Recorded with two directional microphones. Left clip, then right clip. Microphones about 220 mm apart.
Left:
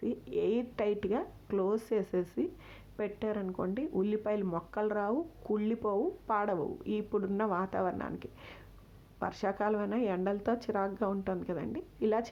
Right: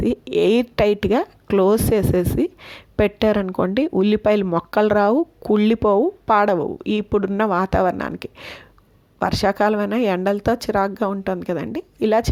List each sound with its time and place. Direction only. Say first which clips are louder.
0.0 s speech: right 15 dB; 40° right (ahead or behind)